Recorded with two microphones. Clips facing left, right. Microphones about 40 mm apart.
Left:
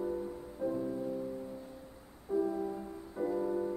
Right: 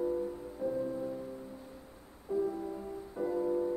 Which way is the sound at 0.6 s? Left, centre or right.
Left.